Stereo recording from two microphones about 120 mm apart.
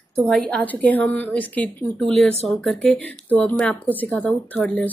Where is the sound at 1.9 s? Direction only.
Centre (ahead or behind).